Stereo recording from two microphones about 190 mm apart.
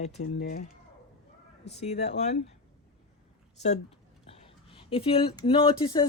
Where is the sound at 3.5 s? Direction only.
35° left (ahead or behind).